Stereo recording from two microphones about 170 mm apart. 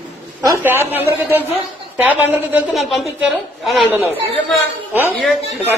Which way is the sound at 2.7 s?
Centre (ahead or behind).